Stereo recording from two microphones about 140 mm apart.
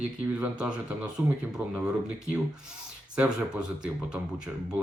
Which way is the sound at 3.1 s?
5° right (ahead or behind).